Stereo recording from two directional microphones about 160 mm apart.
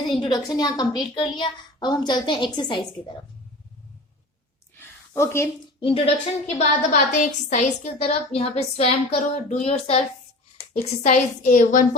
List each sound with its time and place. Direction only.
0.2 s a woman's voice: 25° left (ahead or behind)
4.8 s a sound: 15° left (ahead or behind)
5.8 s a woman's voice: 35° left (ahead or behind); by 11.9 s 55° left (ahead or behind)